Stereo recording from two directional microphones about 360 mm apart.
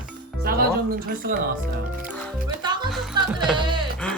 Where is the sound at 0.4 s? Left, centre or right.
Right.